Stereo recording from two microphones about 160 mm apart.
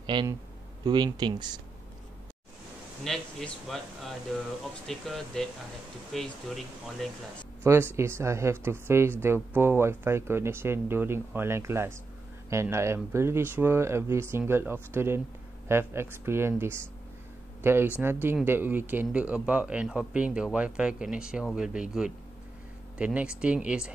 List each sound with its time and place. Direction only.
0.0 s a man's voice: 30° right (ahead or behind)
3.0 s speech: 5° left (ahead or behind)
7.6 s speech: 15° right (ahead or behind)